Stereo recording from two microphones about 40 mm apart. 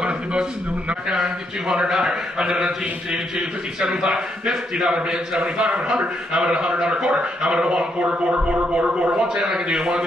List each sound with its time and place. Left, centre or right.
0.0 s a man's voice: right